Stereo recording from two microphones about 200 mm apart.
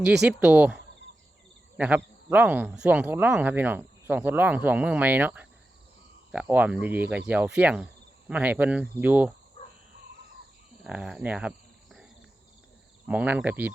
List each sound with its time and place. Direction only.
0.0 s speech: 5° right (ahead or behind)
1.8 s speech: 5° right (ahead or behind)
9.6 s a sound: 30° left (ahead or behind)
10.8 s cricket: 5° right (ahead or behind)
13.1 s speech: 5° right (ahead or behind)